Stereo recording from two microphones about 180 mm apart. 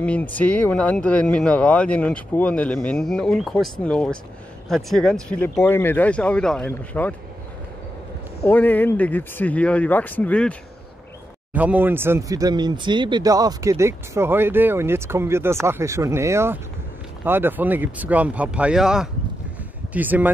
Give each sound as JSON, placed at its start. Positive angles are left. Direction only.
{"t": 0.0, "sound": "speech", "side_deg": 10}
{"t": 8.5, "sound": "speech", "side_deg": 10}
{"t": 11.5, "sound": "speech", "side_deg": -10}